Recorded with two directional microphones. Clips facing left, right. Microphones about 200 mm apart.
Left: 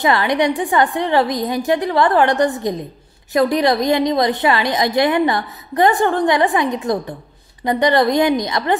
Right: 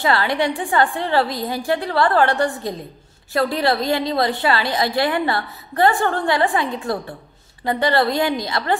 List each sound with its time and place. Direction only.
0.0 s a woman's voice: 20° left (ahead or behind)